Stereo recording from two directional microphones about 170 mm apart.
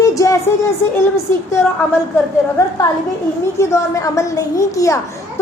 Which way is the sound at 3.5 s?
15° left (ahead or behind).